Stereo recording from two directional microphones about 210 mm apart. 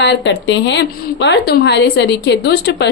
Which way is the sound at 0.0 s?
55° left (ahead or behind).